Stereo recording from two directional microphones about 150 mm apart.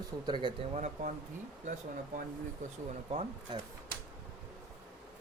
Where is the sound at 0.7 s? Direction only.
50° right (ahead or behind).